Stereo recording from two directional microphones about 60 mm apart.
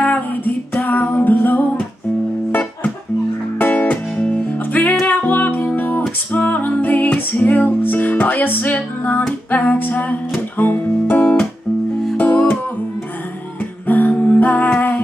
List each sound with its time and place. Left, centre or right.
0.7 s music: left
3.5 s music: left
13.8 s music: left